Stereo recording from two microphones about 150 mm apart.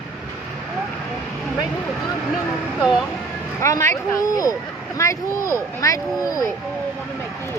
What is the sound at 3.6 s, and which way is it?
Speech, 20° left (ahead or behind).